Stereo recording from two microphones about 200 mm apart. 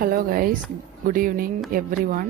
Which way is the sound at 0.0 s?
45° right (ahead or behind).